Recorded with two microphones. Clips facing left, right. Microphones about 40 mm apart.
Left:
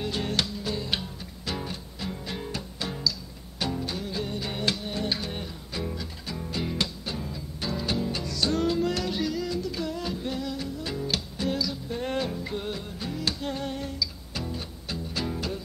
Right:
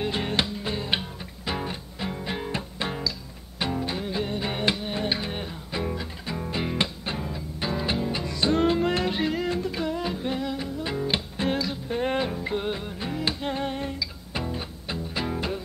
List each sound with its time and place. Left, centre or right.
0.0 s music: right